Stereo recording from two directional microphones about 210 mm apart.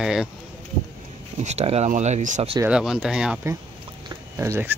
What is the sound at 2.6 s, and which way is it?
Speech, 5° right (ahead or behind).